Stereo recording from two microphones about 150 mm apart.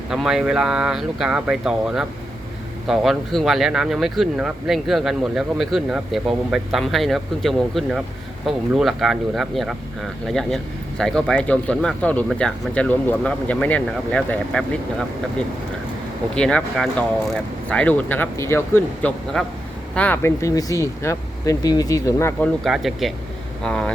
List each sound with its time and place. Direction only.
0.1 s speech: 5° right (ahead or behind); by 19.1 s 15° left (ahead or behind)
19.3 s speech: 5° left (ahead or behind)
22.6 s speech: centre (ahead or behind)